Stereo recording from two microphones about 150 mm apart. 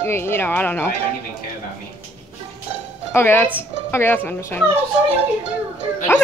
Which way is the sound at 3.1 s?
15° left (ahead or behind).